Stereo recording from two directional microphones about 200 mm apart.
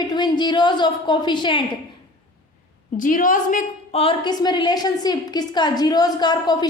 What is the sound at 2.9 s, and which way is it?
A woman's voice, 40° left (ahead or behind).